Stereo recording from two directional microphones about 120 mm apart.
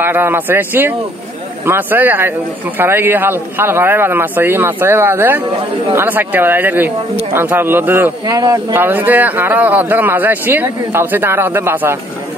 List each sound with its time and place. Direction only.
0.0 s speech: 15° right (ahead or behind)
8.3 s speech: 30° right (ahead or behind)
8.7 s speech: 15° right (ahead or behind)